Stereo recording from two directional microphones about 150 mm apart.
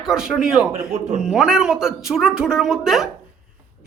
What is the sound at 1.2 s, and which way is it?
A woman's voice, 5° right (ahead or behind).